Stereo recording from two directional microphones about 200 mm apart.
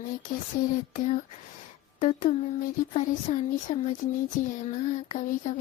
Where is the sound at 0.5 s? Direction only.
45° left (ahead or behind).